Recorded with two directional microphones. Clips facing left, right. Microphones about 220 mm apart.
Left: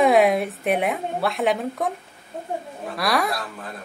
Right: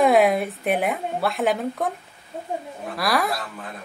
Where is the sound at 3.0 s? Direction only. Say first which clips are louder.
Even; centre (ahead or behind).